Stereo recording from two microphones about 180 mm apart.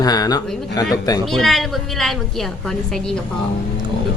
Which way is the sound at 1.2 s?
Centre (ahead or behind).